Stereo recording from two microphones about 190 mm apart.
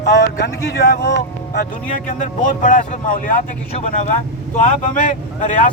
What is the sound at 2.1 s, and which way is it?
Speech, 40° left (ahead or behind).